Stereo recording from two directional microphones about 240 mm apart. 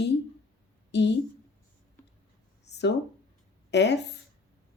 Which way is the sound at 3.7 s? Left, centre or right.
Left.